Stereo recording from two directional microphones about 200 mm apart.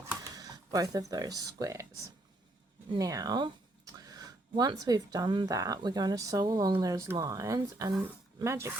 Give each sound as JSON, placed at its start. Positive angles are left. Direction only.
{"t": 0.2, "sound": "speech", "side_deg": -20}
{"t": 2.9, "sound": "speech", "side_deg": -15}